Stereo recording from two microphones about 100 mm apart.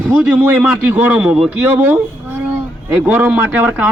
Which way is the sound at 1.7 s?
20° right (ahead or behind).